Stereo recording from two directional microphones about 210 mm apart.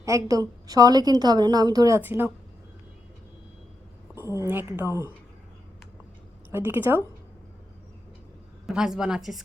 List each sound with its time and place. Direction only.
0.0 s a woman's voice: 15° right (ahead or behind)
4.4 s a woman's voice: 10° right (ahead or behind)
6.5 s a woman's voice: 10° right (ahead or behind)
8.6 s a woman's voice: 5° right (ahead or behind)